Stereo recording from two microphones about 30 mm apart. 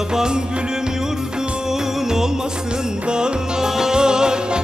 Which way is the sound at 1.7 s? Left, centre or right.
Centre.